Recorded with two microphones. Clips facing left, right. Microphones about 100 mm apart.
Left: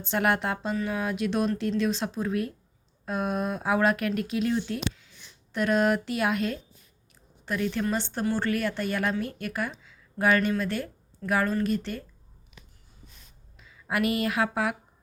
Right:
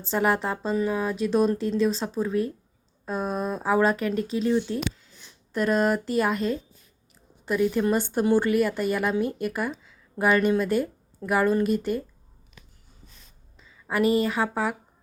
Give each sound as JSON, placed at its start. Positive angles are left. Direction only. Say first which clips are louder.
{"t": 0.1, "sound": "speech", "louder": "right 2 dB", "side_deg": 0}
{"t": 4.7, "sound": "a woman's voice", "louder": "right 3 dB", "side_deg": -15}
{"t": 5.5, "sound": "a woman's voice", "louder": "right 1 dB", "side_deg": 0}
{"t": 9.8, "sound": "a sound", "louder": "even", "side_deg": -5}
{"t": 10.6, "sound": "a woman's voice", "louder": "right 6 dB", "side_deg": -5}
{"t": 13.6, "sound": "a sound", "louder": "right 1 dB", "side_deg": 5}
{"t": 14.0, "sound": "a woman's voice", "louder": "right 6 dB", "side_deg": -35}
{"t": 14.3, "sound": "speech", "louder": "right 1 dB", "side_deg": 0}